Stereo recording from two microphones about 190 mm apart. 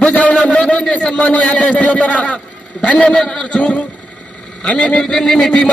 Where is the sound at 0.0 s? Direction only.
5° left (ahead or behind).